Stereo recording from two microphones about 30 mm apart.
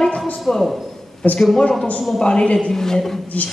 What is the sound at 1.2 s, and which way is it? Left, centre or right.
Speech, left.